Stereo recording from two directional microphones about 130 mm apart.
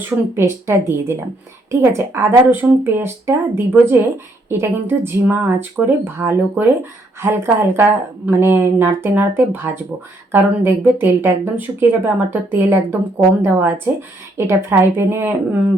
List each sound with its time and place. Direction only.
0.3 s a woman's voice: 20° right (ahead or behind)